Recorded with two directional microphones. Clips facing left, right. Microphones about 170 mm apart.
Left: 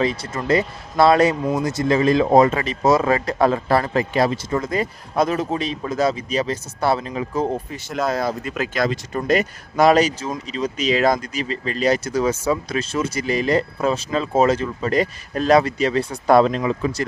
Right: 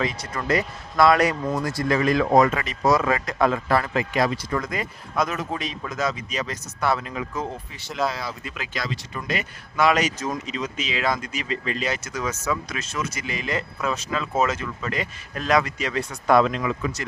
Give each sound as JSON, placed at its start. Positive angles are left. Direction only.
{"t": 0.0, "sound": "speech", "side_deg": 30}